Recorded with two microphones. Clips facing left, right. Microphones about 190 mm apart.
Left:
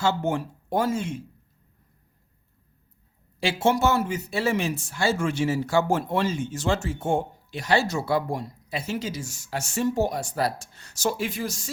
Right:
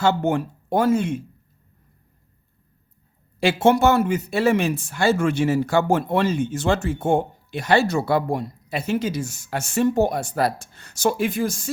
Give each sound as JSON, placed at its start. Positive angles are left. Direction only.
{"t": 0.0, "sound": "speech", "side_deg": -60}
{"t": 3.4, "sound": "speech", "side_deg": -60}